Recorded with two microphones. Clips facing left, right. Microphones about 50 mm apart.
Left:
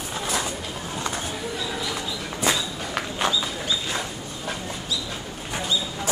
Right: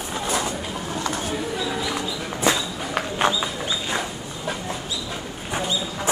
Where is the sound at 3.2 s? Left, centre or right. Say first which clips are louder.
Right 3 dB; right.